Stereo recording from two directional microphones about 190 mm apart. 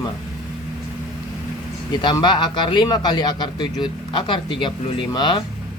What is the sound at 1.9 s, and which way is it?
A man's voice, 25° left (ahead or behind).